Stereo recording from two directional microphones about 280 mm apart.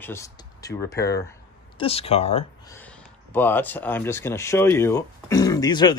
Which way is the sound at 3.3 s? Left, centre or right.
Centre.